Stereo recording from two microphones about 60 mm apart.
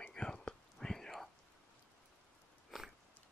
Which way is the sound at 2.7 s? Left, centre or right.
Centre.